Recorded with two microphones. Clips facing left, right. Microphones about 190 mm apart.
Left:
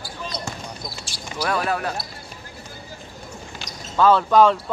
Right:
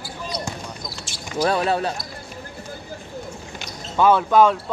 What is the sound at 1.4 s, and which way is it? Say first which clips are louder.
Speech: right 3 dB; 25° right (ahead or behind).